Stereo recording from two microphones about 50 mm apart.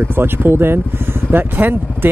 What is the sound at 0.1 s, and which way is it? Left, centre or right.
Speech, right.